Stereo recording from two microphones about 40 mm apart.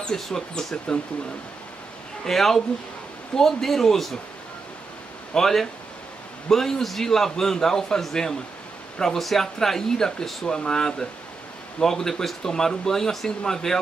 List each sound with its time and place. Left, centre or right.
0.1 s a man's voice: centre
2.2 s a man's voice: centre
5.3 s a man's voice: centre